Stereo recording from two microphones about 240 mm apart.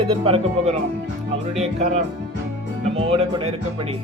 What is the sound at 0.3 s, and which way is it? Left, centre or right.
Speech, right.